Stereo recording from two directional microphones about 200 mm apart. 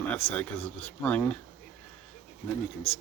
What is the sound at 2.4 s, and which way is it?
Speech, 10° left (ahead or behind).